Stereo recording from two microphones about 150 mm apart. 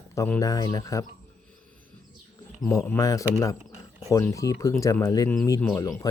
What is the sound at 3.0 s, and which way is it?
Speech, 20° left (ahead or behind).